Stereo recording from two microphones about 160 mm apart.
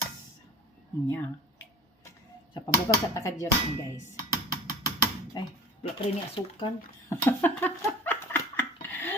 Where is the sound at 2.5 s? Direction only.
25° left (ahead or behind).